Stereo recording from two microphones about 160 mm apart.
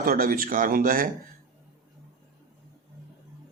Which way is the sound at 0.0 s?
65° right (ahead or behind).